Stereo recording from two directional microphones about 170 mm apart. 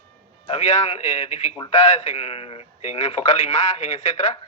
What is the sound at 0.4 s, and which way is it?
Speech, 35° left (ahead or behind).